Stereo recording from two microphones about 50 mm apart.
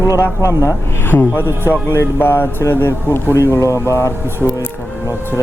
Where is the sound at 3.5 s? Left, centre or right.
Left.